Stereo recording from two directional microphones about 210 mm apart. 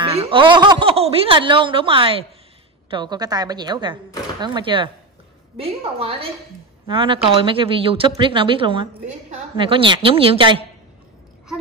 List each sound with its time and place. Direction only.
0.0 s speech: 25° right (ahead or behind)